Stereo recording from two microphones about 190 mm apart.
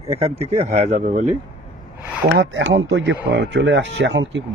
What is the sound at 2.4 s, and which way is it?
Speech, 75° right (ahead or behind).